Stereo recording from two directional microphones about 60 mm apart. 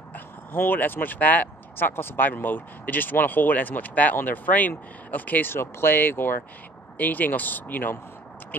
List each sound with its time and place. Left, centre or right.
0.1 s speech: left